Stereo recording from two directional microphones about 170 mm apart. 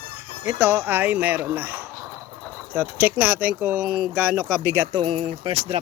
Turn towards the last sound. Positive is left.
turn(degrees=-35)  # may be behind; listen again after turning